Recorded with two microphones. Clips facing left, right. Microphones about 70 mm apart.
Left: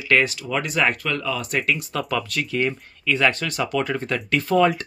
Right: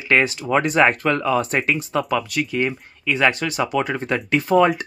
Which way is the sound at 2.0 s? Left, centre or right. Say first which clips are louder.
Right 3 dB; centre.